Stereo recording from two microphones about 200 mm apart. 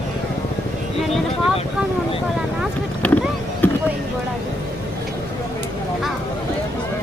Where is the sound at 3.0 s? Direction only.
5° left (ahead or behind).